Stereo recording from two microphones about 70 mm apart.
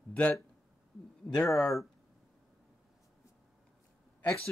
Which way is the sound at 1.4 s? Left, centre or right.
Centre.